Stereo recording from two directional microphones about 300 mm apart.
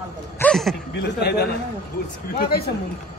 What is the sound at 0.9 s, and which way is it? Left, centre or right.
Speech, left.